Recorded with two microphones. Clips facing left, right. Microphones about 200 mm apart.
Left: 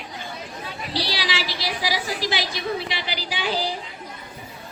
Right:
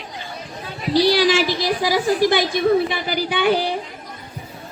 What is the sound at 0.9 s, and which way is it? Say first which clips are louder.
A woman's voice: right 13 dB; 50° right (ahead or behind).